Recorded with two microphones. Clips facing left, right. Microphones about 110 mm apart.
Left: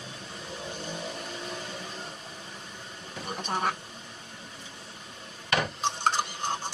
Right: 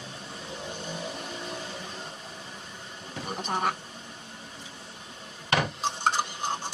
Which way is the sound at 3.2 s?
5° right (ahead or behind).